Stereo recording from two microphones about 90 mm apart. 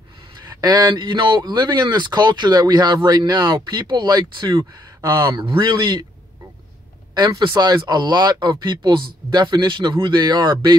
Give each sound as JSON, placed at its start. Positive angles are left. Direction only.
{"t": 0.6, "sound": "speech", "side_deg": -55}
{"t": 5.0, "sound": "speech", "side_deg": -30}
{"t": 5.3, "sound": "speech", "side_deg": -70}
{"t": 7.2, "sound": "speech", "side_deg": -50}